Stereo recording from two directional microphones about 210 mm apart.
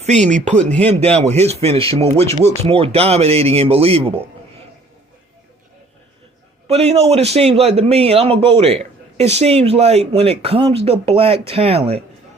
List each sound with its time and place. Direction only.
0.0 s speech: 35° right (ahead or behind)
0.6 s speech: 5° left (ahead or behind)
0.9 s a man's voice: 30° right (ahead or behind)
6.7 s a man's voice: 30° right (ahead or behind)